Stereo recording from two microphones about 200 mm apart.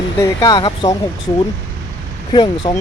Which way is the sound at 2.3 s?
25° left (ahead or behind).